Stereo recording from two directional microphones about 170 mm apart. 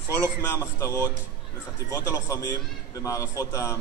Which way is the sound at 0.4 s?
15° left (ahead or behind).